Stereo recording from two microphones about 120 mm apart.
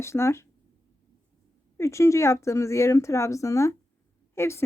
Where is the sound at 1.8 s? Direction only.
25° left (ahead or behind).